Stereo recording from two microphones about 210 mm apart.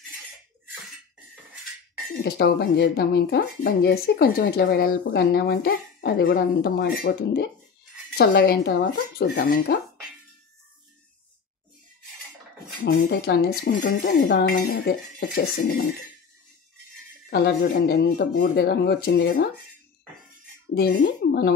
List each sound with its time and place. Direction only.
2.2 s speech: 50° left (ahead or behind)
12.8 s speech: 55° left (ahead or behind)
17.3 s speech: 50° left (ahead or behind)
20.7 s speech: 50° left (ahead or behind)